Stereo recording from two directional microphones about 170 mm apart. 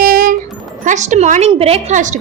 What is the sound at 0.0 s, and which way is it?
Music, 60° right (ahead or behind).